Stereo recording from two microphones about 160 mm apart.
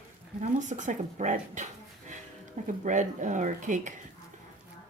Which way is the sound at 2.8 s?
50° right (ahead or behind).